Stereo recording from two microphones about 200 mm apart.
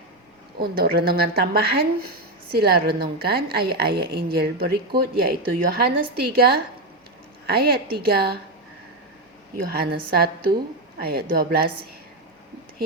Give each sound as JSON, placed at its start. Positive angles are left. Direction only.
{"t": 0.6, "sound": "a woman's voice", "side_deg": -50}
{"t": 9.6, "sound": "a woman's voice", "side_deg": -50}